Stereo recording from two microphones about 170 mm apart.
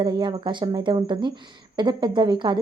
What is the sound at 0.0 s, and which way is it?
Speech, 25° right (ahead or behind).